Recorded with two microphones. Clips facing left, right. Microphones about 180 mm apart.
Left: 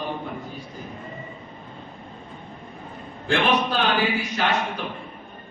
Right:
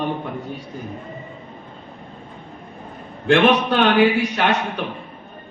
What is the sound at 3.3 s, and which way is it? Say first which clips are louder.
A man's voice: right 6 dB; 65° right (ahead or behind).